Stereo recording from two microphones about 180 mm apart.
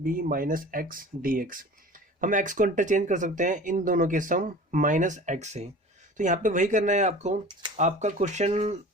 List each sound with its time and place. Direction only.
0.0 s speech: 50° right (ahead or behind)